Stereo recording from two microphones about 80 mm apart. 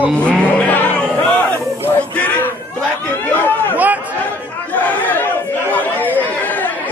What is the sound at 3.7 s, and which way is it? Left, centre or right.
Chatter, centre.